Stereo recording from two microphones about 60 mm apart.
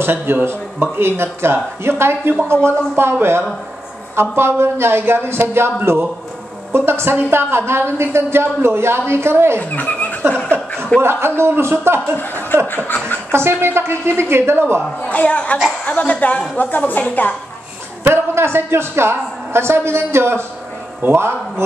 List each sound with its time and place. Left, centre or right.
0.0 s a man's voice: right
9.6 s speech: left
10.3 s chuckle: left
11.0 s a woman's voice: right
12.2 s speech: left
12.6 s chuckle: left
13.3 s a woman's voice: right
15.0 s a woman's voice: left
18.0 s a woman's voice: right